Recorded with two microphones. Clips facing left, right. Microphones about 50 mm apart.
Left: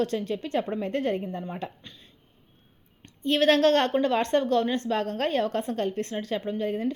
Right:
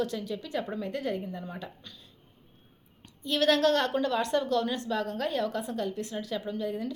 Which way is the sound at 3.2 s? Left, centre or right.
Left.